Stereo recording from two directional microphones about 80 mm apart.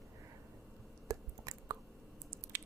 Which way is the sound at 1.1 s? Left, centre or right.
Right.